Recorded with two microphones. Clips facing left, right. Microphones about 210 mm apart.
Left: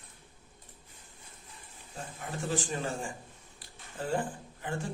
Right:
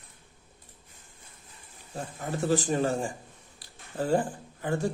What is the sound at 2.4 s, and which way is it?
Speech, 40° right (ahead or behind).